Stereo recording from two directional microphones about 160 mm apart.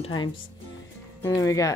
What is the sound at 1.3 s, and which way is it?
Speech, 20° left (ahead or behind).